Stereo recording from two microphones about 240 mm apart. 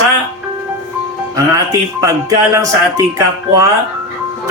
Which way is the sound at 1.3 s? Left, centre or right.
Centre.